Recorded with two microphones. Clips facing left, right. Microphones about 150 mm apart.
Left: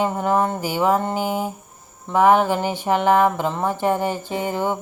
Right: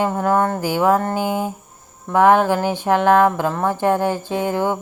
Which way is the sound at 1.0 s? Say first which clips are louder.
Right 2 dB; centre (ahead or behind).